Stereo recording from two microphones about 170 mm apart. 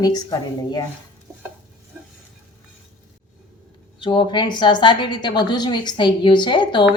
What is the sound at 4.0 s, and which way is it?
A woman's voice, 25° left (ahead or behind).